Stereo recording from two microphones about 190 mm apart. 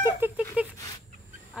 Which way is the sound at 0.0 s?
10° right (ahead or behind).